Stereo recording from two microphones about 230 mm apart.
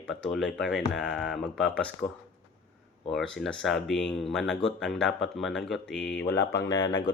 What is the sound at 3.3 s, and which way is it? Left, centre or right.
Speech, centre.